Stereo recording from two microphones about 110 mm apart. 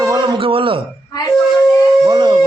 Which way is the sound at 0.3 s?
55° right (ahead or behind).